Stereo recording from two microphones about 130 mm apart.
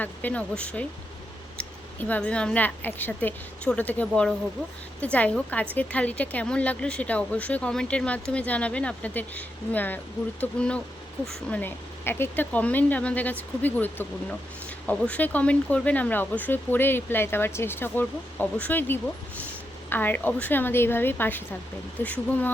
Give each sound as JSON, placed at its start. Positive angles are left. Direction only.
{"t": 0.0, "sound": "a woman's voice", "side_deg": 15}